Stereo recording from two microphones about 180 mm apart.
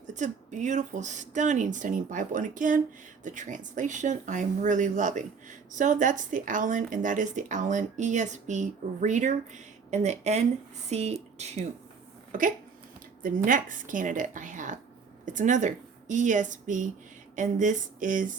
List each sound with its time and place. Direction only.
0.1 s speech: 40° right (ahead or behind)
13.2 s speech: 50° right (ahead or behind)